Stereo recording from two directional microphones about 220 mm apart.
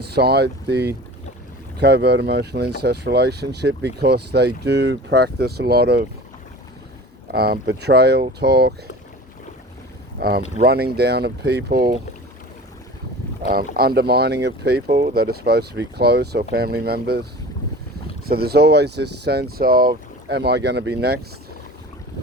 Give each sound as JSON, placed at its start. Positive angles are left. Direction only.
{"t": 0.0, "sound": "speech", "side_deg": -45}
{"t": 7.3, "sound": "speech", "side_deg": -45}
{"t": 10.2, "sound": "speech", "side_deg": -45}
{"t": 13.5, "sound": "speech", "side_deg": -45}
{"t": 18.3, "sound": "speech", "side_deg": -45}